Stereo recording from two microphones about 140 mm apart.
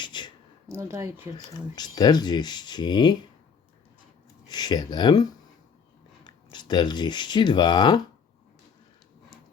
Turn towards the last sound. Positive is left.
turn(degrees=30)  # may be behind; listen again after turning